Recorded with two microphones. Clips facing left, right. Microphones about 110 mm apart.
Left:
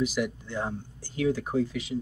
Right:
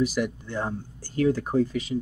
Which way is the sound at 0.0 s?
45° right (ahead or behind).